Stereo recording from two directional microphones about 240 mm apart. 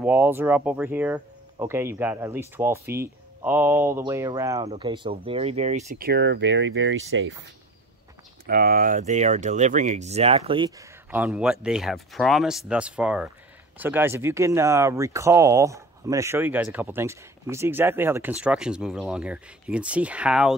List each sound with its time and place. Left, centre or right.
0.0 s speech: centre; by 7.3 s right
8.5 s speech: right
11.1 s speech: centre